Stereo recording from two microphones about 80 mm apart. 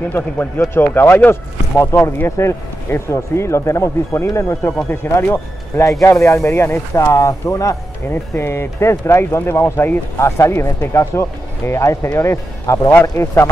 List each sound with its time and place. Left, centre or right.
0.1 s speech: left
8.1 s speech: left